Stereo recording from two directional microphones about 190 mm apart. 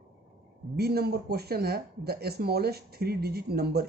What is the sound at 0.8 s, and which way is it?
Speech, 55° right (ahead or behind).